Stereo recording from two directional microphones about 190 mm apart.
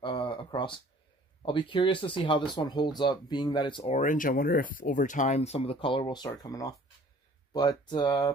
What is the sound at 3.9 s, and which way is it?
Speech, 45° left (ahead or behind).